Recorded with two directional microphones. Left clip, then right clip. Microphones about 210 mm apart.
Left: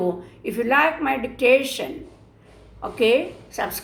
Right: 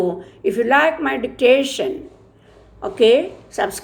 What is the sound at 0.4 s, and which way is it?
A woman's voice, 35° right (ahead or behind).